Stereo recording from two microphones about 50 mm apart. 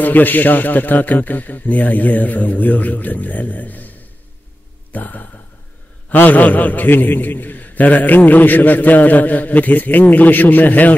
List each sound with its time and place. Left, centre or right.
0.0 s a man's voice: left
4.9 s a man's voice: left